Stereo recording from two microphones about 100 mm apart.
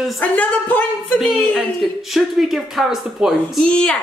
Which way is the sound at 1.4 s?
Centre (ahead or behind).